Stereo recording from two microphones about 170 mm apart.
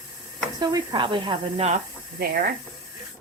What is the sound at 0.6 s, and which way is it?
Speech, 25° right (ahead or behind).